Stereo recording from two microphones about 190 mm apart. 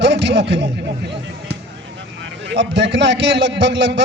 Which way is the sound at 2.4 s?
70° right (ahead or behind).